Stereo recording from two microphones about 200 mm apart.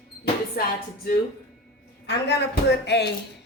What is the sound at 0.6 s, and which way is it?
Speech, 50° left (ahead or behind).